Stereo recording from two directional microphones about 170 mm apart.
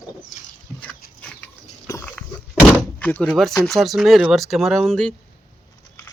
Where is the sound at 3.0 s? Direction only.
10° left (ahead or behind).